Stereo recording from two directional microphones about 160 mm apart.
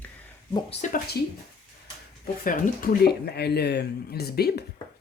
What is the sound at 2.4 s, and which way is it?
Speech, 60° left (ahead or behind).